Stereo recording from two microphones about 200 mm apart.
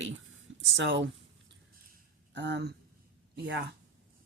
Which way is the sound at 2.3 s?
60° right (ahead or behind).